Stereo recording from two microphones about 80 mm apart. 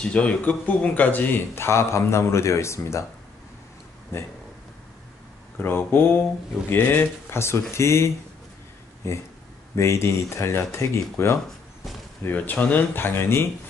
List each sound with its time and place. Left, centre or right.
0.0 s speech: centre; by 3.1 s left
4.1 s speech: left
5.6 s speech: left